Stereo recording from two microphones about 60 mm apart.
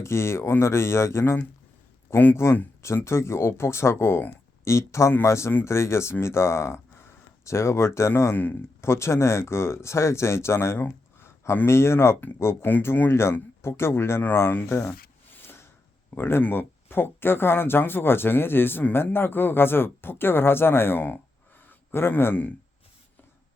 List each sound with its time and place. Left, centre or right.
0.0 s speech: left
8.8 s speech: left
15.4 s a sound: left
16.1 s speech: left